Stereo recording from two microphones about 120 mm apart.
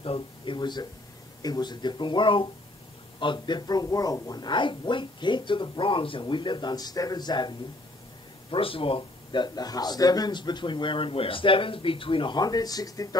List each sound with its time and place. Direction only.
0.0 s a man's voice: 45° left (ahead or behind)
8.5 s a man's voice: 50° left (ahead or behind); by 13.2 s 30° left (ahead or behind)